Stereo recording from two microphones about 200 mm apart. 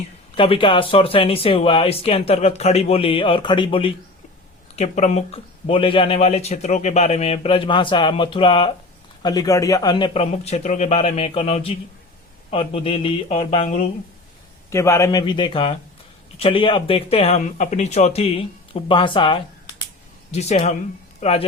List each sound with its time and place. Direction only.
0.3 s speech: 25° left (ahead or behind)
14.7 s speech: 15° left (ahead or behind); by 21.4 s 30° left (ahead or behind)